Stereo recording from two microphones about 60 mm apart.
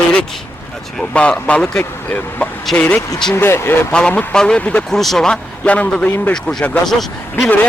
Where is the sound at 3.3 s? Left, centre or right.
Left.